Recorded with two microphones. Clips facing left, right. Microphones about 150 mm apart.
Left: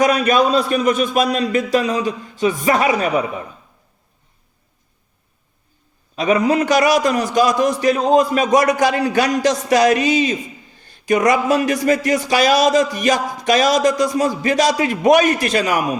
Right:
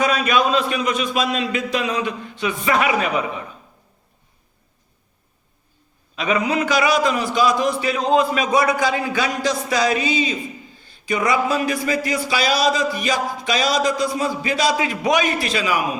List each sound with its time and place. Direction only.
0.0 s a man's voice: 45° left (ahead or behind)
6.1 s a man's voice: 40° left (ahead or behind)